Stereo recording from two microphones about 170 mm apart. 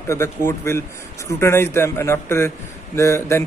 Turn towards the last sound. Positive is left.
turn(degrees=15)  # may be behind; listen again after turning